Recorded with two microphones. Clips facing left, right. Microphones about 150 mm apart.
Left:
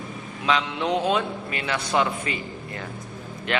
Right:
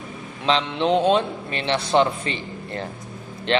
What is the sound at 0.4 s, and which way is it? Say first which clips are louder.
A man's voice: right 3 dB; 25° right (ahead or behind).